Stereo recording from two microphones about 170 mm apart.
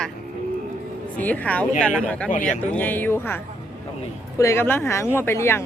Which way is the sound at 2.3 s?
50° left (ahead or behind).